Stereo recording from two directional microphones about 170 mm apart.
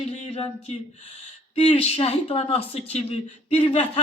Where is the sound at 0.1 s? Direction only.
35° left (ahead or behind).